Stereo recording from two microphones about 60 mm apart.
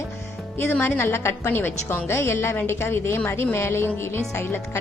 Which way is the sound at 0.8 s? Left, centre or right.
Left.